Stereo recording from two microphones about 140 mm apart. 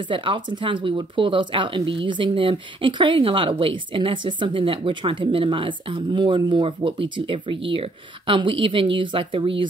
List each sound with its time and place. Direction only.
0.1 s speech: 35° right (ahead or behind)